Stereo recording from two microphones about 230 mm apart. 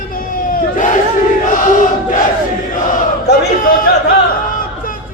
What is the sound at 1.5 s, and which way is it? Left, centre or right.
Crowd, left.